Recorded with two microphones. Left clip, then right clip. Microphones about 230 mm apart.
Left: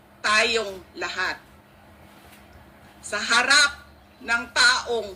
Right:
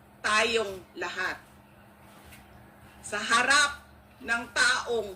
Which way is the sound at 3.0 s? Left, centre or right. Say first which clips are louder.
Left 4 dB; left.